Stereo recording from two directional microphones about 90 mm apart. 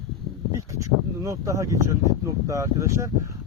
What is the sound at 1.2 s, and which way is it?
Speech, 35° right (ahead or behind).